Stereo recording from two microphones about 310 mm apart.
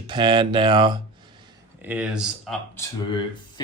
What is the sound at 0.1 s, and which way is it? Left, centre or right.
Speech, centre.